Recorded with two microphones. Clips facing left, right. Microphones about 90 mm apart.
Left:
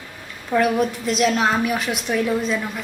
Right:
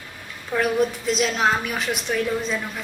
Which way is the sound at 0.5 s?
Centre (ahead or behind).